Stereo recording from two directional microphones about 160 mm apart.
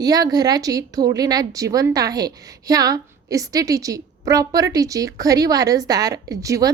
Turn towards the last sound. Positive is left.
turn(degrees=-20)  # may be behind; listen again after turning